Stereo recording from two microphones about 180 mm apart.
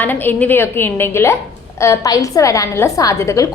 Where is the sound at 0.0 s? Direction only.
10° left (ahead or behind).